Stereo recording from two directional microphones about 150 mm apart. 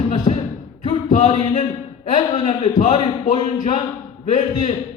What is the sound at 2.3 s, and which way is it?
Speech, 40° left (ahead or behind).